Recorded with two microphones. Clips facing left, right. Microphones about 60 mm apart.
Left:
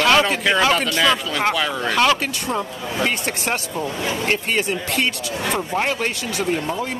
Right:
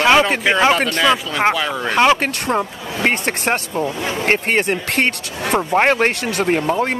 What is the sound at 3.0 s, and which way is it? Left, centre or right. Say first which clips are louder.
Speech: right 7 dB; right.